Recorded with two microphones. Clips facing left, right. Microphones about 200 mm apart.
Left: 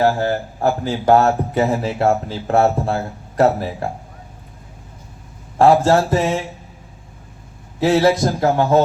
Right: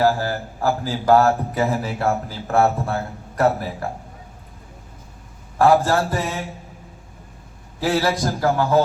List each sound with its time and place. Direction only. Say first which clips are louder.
0.0 s a man's voice: left 3 dB; 25° left (ahead or behind)
5.5 s a man's voice: left 3 dB; 25° left (ahead or behind)
7.8 s a man's voice: left 6 dB; 25° left (ahead or behind)